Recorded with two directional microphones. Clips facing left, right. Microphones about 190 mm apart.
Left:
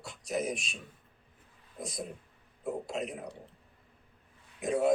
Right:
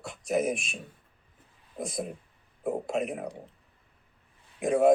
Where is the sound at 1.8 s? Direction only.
55° right (ahead or behind).